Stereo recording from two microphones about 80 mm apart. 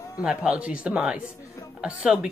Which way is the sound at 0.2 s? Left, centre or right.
Centre.